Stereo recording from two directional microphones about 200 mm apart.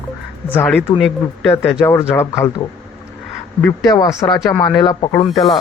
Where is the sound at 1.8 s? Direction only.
15° left (ahead or behind).